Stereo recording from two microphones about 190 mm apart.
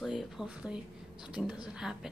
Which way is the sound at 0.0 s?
Centre (ahead or behind).